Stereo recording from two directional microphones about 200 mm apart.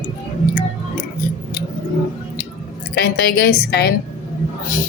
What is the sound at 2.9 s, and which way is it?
A woman's voice, 55° left (ahead or behind).